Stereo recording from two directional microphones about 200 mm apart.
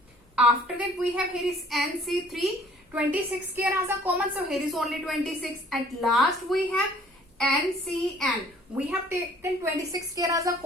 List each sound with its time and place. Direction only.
0.3 s a woman's voice: 5° right (ahead or behind)
7.9 s a woman's voice: 5° left (ahead or behind)
8.7 s a woman's voice: 10° right (ahead or behind)